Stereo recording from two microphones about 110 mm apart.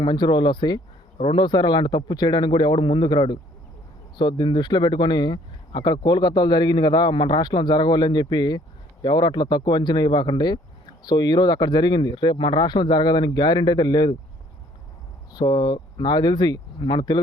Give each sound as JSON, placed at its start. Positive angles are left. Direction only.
{"t": 0.0, "sound": "speech", "side_deg": 40}
{"t": 15.3, "sound": "speech", "side_deg": 40}